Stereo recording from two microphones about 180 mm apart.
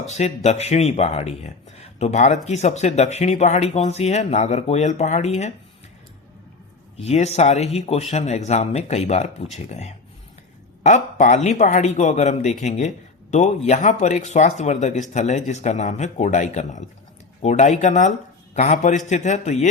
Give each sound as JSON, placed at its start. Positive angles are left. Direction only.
{"t": 0.0, "sound": "speech", "side_deg": 40}
{"t": 6.9, "sound": "speech", "side_deg": 40}